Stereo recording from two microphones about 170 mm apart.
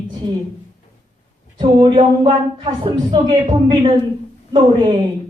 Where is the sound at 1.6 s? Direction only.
25° right (ahead or behind).